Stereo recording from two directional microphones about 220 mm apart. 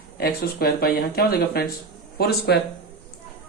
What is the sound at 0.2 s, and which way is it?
Speech, 45° left (ahead or behind).